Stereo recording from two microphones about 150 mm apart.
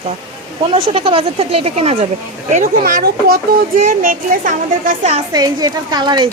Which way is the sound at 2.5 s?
60° right (ahead or behind).